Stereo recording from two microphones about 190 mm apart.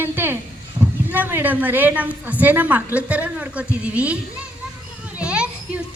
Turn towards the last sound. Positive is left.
turn(degrees=-5)  # may be behind; listen again after turning